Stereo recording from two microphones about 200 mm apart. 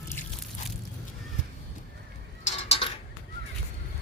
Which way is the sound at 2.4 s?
30° left (ahead or behind).